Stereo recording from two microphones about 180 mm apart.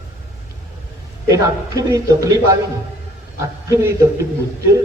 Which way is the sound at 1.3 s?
20° right (ahead or behind).